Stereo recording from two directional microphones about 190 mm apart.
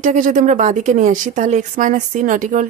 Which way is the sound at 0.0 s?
45° right (ahead or behind).